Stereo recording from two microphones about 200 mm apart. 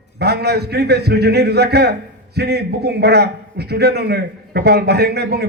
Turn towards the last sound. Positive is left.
turn(degrees=-55)  # may be behind; listen again after turning